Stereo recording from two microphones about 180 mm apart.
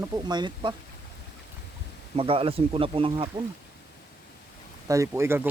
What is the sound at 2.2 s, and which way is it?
Speech, 30° right (ahead or behind).